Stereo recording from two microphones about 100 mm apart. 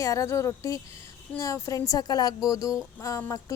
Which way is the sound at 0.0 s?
30° left (ahead or behind).